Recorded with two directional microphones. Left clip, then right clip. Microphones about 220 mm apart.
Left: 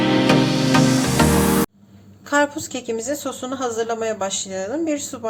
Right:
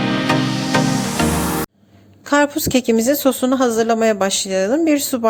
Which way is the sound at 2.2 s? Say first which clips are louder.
Right 3 dB; 35° right (ahead or behind).